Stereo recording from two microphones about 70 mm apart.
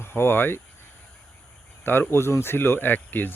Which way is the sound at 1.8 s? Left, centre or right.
Left.